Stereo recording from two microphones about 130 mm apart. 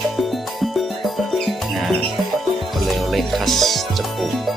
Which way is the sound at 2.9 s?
Centre (ahead or behind).